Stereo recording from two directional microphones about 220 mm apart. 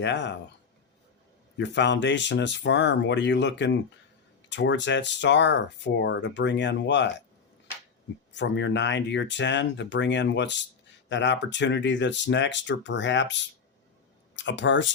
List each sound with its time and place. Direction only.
0.0 s speech: 55° left (ahead or behind)
1.5 s speech: 55° left (ahead or behind)
8.3 s speech: 55° left (ahead or behind)